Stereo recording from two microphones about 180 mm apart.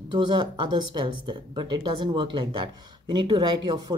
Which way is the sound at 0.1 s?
25° right (ahead or behind).